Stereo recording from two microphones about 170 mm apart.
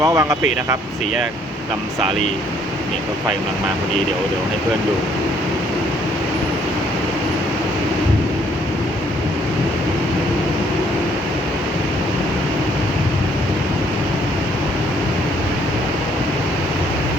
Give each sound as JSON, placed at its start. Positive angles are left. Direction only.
{"t": 0.0, "sound": "speech", "side_deg": -20}